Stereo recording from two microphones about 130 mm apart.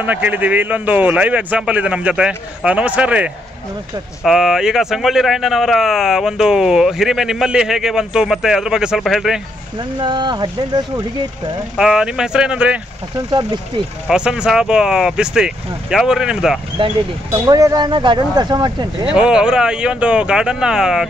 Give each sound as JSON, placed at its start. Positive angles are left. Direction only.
{"t": 0.0, "sound": "a man's voice", "side_deg": -15}
{"t": 9.9, "sound": "speech", "side_deg": -35}
{"t": 11.7, "sound": "speech", "side_deg": -5}
{"t": 14.0, "sound": "speech", "side_deg": -5}
{"t": 16.8, "sound": "speech", "side_deg": -45}
{"t": 17.3, "sound": "speech", "side_deg": -25}
{"t": 19.1, "sound": "speech", "side_deg": -5}